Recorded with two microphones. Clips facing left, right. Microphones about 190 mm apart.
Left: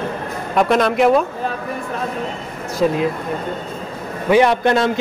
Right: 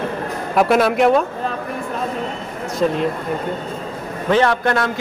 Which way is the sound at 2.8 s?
5° left (ahead or behind).